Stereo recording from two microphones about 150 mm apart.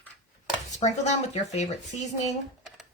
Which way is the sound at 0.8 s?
50° left (ahead or behind).